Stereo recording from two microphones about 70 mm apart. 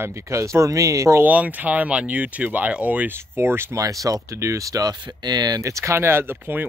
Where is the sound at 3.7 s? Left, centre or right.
Right.